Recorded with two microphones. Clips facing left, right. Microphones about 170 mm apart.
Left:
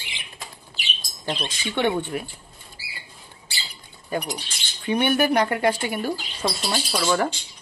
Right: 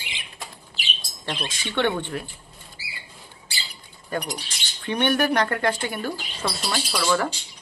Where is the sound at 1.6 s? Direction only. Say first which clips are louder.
Left 1 dB; 10° left (ahead or behind).